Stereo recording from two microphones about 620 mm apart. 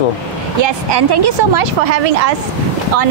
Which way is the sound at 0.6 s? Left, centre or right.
Right.